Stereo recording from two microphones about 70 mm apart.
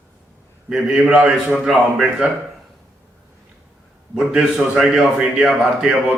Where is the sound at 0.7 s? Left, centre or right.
Centre.